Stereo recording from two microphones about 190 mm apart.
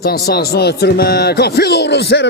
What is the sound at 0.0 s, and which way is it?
Speech, 55° left (ahead or behind).